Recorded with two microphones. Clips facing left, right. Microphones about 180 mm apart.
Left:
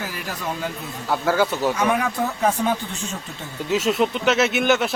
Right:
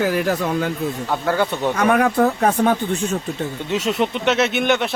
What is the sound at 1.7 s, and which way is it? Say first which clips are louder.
Speech: right 5 dB; 55° right (ahead or behind).